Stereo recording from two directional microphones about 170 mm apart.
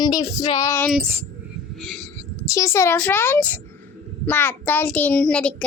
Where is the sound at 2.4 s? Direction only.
20° left (ahead or behind).